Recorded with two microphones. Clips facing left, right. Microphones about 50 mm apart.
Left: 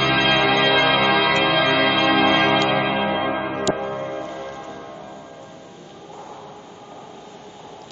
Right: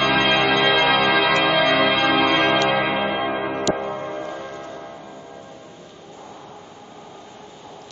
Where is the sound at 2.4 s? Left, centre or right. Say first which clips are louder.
Even; centre.